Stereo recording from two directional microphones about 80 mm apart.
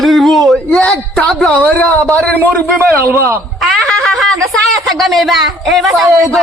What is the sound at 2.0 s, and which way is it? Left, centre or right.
Speech, centre.